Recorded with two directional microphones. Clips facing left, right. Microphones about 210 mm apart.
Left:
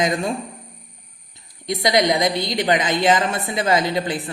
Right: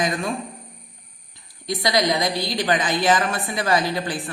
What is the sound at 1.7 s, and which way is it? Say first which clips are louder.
A woman's voice: left 3 dB; 25° left (ahead or behind).